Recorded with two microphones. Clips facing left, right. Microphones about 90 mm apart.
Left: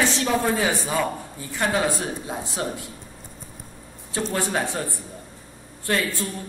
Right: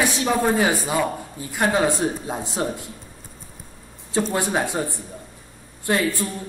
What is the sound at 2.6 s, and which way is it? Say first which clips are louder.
Speech: right 3 dB; 30° right (ahead or behind).